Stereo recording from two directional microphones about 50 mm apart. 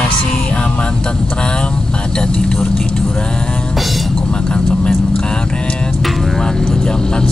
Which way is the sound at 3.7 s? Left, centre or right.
Centre.